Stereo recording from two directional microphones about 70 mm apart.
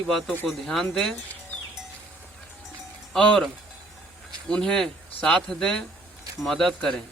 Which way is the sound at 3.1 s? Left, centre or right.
Centre.